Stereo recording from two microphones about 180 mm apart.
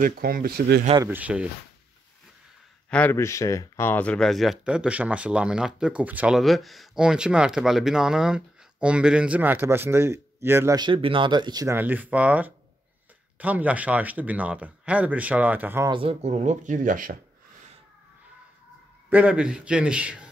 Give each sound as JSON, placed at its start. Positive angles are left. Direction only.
{"t": 0.0, "sound": "speech", "side_deg": -55}
{"t": 1.0, "sound": "speech", "side_deg": -10}
{"t": 2.9, "sound": "speech", "side_deg": 10}
{"t": 15.9, "sound": "speech", "side_deg": -30}
{"t": 19.0, "sound": "speech", "side_deg": -10}